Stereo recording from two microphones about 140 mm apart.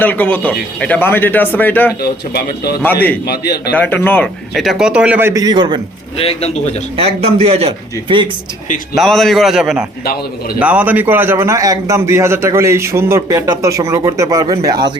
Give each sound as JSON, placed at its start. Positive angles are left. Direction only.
{"t": 0.0, "sound": "speech", "side_deg": 10}
{"t": 4.5, "sound": "speech", "side_deg": 0}
{"t": 5.3, "sound": "a man's voice", "side_deg": -25}
{"t": 6.1, "sound": "a man's voice", "side_deg": 45}
{"t": 6.9, "sound": "a man's voice", "side_deg": -45}
{"t": 9.0, "sound": "a man's voice", "side_deg": 5}